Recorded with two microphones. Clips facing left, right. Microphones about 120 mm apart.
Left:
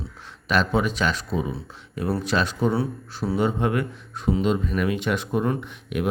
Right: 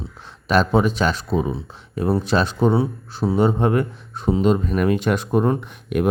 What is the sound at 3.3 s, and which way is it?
Speech, 35° right (ahead or behind).